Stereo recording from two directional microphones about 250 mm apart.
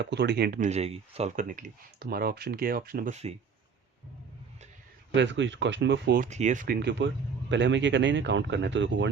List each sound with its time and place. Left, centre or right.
0.0 s speech: right
5.1 s speech: right
6.3 s speech: right